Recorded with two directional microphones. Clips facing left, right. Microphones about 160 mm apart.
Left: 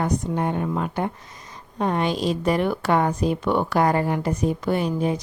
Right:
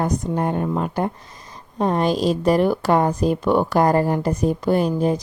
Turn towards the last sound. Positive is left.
turn(degrees=-35)  # may be behind; listen again after turning